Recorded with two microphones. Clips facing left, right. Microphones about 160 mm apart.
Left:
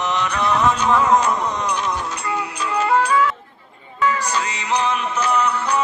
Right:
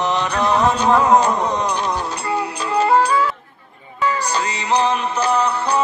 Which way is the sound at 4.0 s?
35° right (ahead or behind).